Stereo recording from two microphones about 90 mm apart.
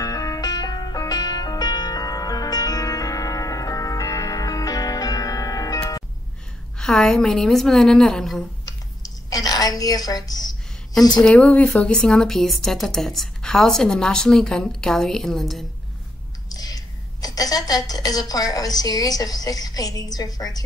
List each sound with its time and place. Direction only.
0.0 s music: 45° left (ahead or behind)
6.8 s speech: 10° left (ahead or behind)
9.3 s a woman's voice: 45° left (ahead or behind)
11.1 s speech: 10° left (ahead or behind)
16.4 s a woman's voice: 45° left (ahead or behind)